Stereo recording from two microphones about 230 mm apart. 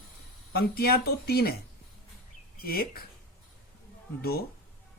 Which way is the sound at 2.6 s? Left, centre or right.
Left.